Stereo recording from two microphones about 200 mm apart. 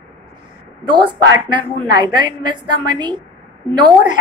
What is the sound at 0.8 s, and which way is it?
A woman's voice, 25° right (ahead or behind).